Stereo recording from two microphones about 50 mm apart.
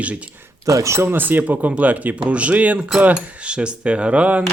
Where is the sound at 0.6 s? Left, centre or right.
Right.